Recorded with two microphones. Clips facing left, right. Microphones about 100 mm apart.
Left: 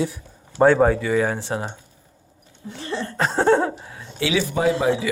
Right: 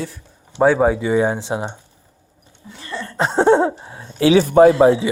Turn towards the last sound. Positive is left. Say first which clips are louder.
# right 10 dB
turn(degrees=-40)  # may be behind; listen again after turning